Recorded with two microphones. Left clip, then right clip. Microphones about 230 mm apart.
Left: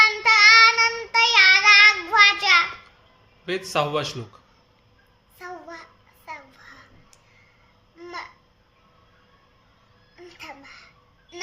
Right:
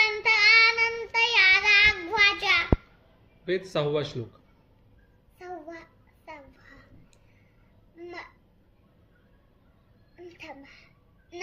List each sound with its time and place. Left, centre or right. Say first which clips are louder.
0.0 s child singing: left 6 dB; centre
3.4 s a man's voice: left 3 dB; left
5.4 s child singing: left 3 dB; centre
7.9 s babbling: left 5 dB; centre
10.2 s a sound: left 3 dB; centre